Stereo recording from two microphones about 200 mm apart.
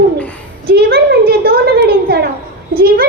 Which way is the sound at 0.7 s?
50° right (ahead or behind).